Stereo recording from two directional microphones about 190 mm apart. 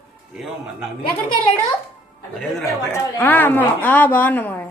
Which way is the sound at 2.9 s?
10° left (ahead or behind).